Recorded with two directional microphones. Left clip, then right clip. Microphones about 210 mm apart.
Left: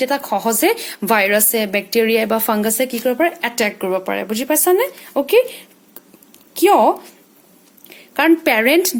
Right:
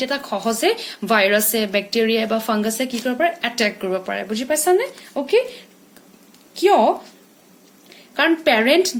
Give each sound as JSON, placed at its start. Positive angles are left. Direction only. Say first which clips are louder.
{"t": 0.0, "sound": "a woman's voice", "louder": "left 4 dB", "side_deg": 45}